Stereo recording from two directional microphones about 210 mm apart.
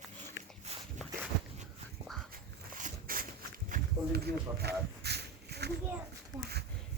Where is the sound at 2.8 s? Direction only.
40° right (ahead or behind).